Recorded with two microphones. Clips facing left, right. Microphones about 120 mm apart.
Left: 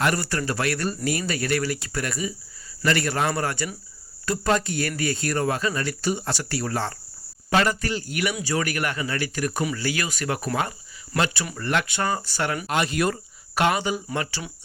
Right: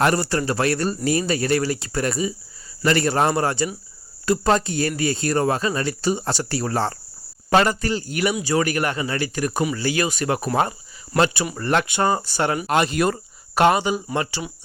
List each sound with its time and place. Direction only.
0.0 s a man's voice: 30° right (ahead or behind)
11.5 s a man's voice: 35° right (ahead or behind)
12.6 s speech: 45° right (ahead or behind)
12.9 s speech: 30° right (ahead or behind)